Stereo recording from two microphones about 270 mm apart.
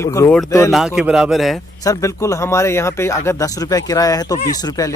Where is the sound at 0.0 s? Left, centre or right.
Centre.